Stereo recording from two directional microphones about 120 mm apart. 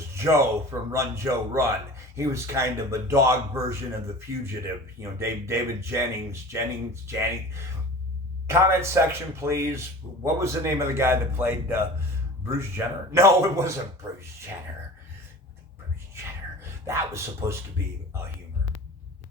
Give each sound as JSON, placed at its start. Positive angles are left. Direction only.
{"t": 0.1, "sound": "a man's voice", "side_deg": -25}
{"t": 5.2, "sound": "a man's voice", "side_deg": -20}
{"t": 16.8, "sound": "a man's voice", "side_deg": -25}